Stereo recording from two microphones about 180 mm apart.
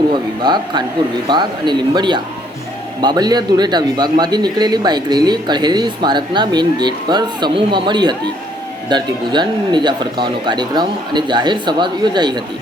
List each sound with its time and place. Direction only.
0.1 s a man's voice: 25° right (ahead or behind)